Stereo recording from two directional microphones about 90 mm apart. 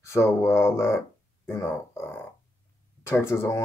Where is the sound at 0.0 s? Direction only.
35° left (ahead or behind).